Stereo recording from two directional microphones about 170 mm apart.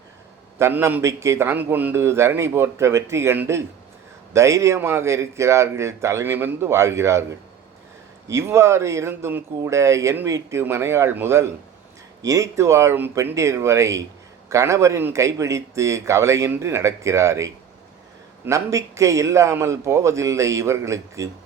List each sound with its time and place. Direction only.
0.6 s speech: 15° right (ahead or behind)